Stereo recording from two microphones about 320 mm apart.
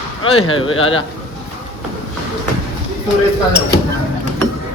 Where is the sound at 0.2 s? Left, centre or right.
Left.